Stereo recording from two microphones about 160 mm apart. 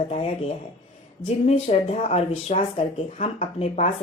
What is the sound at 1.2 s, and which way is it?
A woman's voice, 40° left (ahead or behind).